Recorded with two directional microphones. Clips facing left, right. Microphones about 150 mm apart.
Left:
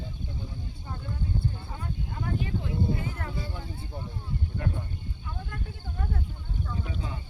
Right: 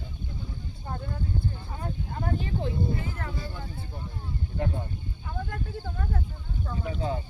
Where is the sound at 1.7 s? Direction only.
40° right (ahead or behind).